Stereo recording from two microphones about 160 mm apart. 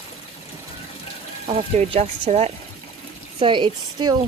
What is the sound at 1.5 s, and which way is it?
Speech, 35° right (ahead or behind).